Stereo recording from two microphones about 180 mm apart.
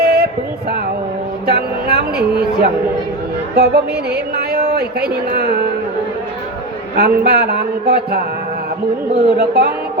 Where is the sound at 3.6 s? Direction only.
65° right (ahead or behind).